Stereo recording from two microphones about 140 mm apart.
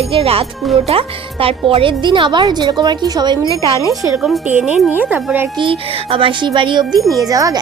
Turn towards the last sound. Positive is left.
turn(degrees=-25)  # may be behind; listen again after turning